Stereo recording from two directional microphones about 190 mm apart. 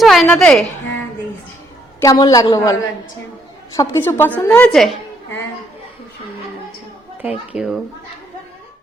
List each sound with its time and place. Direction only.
0.0 s a woman's voice: centre (ahead or behind)
2.0 s a woman's voice: 20° left (ahead or behind)
3.8 s a woman's voice: 10° left (ahead or behind)
7.2 s a child's voice: 5° right (ahead or behind)